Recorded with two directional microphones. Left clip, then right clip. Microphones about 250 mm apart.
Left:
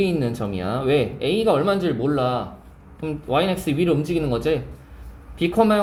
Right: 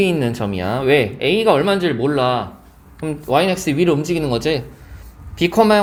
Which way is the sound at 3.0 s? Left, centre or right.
Right.